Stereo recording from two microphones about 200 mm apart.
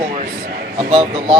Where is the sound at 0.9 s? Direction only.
25° right (ahead or behind).